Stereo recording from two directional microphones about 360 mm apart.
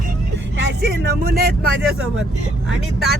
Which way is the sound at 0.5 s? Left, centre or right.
Right.